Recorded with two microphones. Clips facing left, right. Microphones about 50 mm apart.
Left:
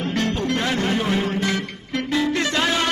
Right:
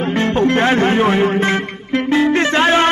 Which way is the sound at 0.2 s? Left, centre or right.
Right.